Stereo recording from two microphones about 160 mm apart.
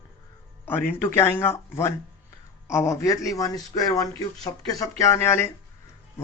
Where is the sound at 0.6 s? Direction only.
15° left (ahead or behind).